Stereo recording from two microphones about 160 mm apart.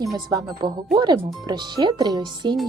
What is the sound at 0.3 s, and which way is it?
Speech, 25° right (ahead or behind).